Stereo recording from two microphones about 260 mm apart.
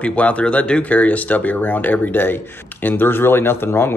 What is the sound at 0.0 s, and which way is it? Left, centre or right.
Speech, centre.